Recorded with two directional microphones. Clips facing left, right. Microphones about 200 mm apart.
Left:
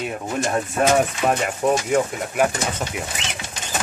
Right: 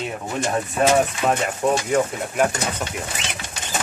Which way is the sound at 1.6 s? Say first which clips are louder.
Left 1 dB; 10° left (ahead or behind).